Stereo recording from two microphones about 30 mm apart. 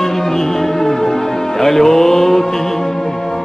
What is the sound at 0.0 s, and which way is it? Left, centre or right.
Music, centre.